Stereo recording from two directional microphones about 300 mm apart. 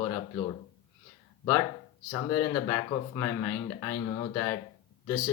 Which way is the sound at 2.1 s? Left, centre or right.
Centre.